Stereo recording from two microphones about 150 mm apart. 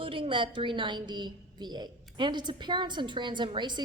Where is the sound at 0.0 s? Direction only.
35° right (ahead or behind).